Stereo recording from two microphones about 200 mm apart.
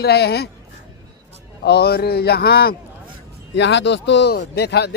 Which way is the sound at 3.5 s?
60° left (ahead or behind).